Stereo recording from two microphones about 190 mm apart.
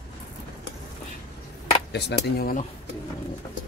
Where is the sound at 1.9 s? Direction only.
55° left (ahead or behind).